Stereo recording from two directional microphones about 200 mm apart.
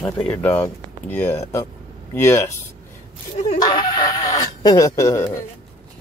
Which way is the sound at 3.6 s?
20° left (ahead or behind).